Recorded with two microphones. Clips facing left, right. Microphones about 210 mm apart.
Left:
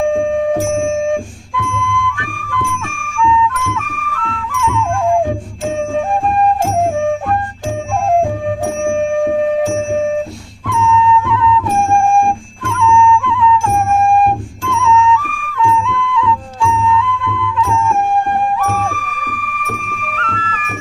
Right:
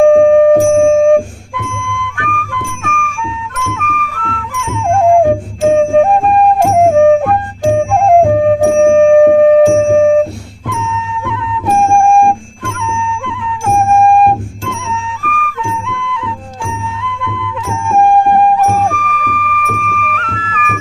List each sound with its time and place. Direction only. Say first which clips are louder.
0.0 s music: right 9 dB; 65° right (ahead or behind)
5.2 s music: right 8 dB; 55° right (ahead or behind)